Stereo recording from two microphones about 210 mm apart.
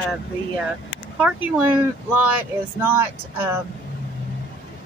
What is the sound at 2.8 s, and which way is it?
Speech, 10° right (ahead or behind).